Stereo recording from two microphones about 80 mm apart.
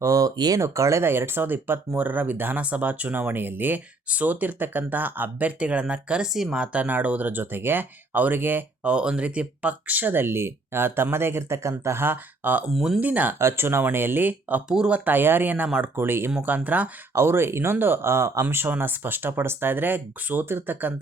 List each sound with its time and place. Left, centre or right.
0.0 s speech: right
0.6 s speech: right
12.7 s speech: centre
13.0 s speech: right
13.4 s speech: right
14.7 s speech: centre
17.2 s speech: right